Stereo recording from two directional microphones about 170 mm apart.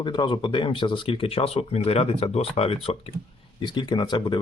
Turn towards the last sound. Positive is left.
turn(degrees=25)  # may be behind; listen again after turning